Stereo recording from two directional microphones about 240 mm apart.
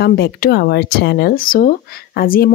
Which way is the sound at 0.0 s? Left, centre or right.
Left.